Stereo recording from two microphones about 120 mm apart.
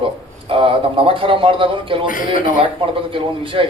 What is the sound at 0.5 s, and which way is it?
A man's voice, 50° right (ahead or behind).